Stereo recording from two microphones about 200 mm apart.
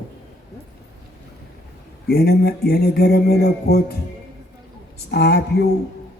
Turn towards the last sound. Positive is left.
turn(degrees=55)  # may be behind; listen again after turning